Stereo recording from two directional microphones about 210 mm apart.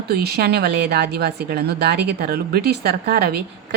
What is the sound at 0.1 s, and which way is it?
A woman's voice, 50° right (ahead or behind).